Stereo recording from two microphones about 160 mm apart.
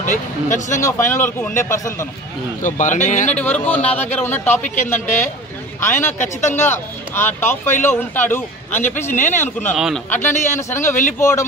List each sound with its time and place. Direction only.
0.0 s speech: 50° left (ahead or behind)
0.7 s a man's voice: 15° left (ahead or behind)
2.6 s speech: 50° left (ahead or behind)
3.3 s a man's voice: 10° left (ahead or behind)
5.0 s speech: 50° left (ahead or behind)
5.8 s speech: 15° left (ahead or behind)
6.1 s speech: 50° left (ahead or behind)
6.5 s a man's voice: 15° left (ahead or behind)
10.1 s speech: 50° left (ahead or behind)
10.7 s a man's voice: 15° left (ahead or behind)